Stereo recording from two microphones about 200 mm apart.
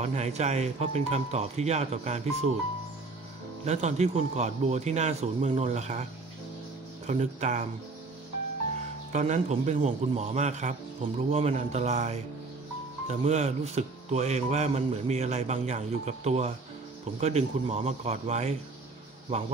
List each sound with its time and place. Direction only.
0.0 s a man's voice: 35° right (ahead or behind)
3.6 s a man's voice: 35° right (ahead or behind)
7.1 s a man's voice: 35° right (ahead or behind)
9.1 s a man's voice: 35° right (ahead or behind)
13.2 s a man's voice: 35° right (ahead or behind)